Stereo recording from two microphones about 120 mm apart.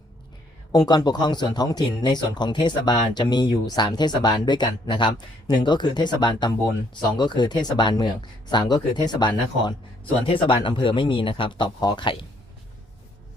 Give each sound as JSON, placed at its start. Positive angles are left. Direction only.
{"t": 0.7, "sound": "speech", "side_deg": 35}